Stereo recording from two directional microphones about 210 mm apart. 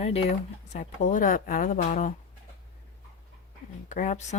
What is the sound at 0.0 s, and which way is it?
Speech, 30° left (ahead or behind).